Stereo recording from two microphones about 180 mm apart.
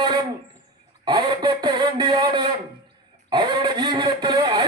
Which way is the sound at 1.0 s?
25° right (ahead or behind).